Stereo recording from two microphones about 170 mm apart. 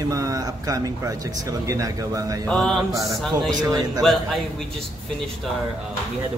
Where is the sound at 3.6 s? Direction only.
20° right (ahead or behind).